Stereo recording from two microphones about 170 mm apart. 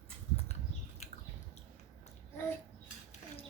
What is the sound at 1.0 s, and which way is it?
Squish, 40° left (ahead or behind).